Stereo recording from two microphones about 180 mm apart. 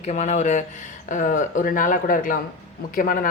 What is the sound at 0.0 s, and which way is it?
Speech, 40° left (ahead or behind).